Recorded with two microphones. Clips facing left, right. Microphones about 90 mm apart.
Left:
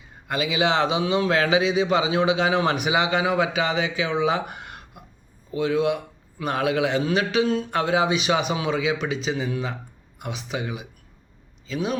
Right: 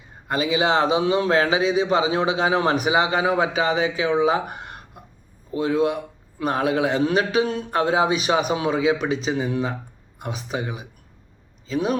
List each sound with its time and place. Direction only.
0.3 s a man's voice: 35° right (ahead or behind)